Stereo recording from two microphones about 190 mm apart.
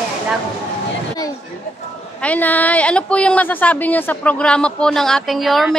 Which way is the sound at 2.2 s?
10° left (ahead or behind).